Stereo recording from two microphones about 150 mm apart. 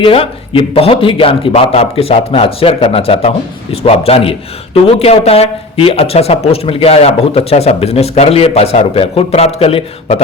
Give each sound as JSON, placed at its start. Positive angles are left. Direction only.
{"t": 0.0, "sound": "a man's voice", "side_deg": 40}